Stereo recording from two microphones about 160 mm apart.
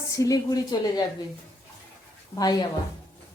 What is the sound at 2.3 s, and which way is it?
Speech, 25° left (ahead or behind).